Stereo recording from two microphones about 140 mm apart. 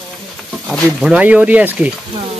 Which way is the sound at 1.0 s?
10° right (ahead or behind).